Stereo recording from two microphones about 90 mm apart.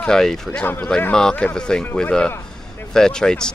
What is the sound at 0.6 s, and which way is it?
Speech, 20° left (ahead or behind).